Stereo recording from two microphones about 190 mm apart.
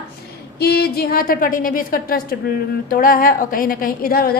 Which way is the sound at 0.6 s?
55° left (ahead or behind).